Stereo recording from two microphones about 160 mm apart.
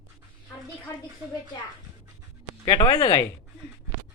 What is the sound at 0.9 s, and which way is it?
Speech, 20° left (ahead or behind).